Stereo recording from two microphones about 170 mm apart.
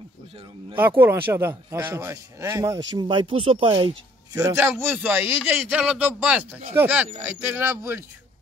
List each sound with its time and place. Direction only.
0.7 s speech: 10° right (ahead or behind)
3.0 s speech: 30° right (ahead or behind)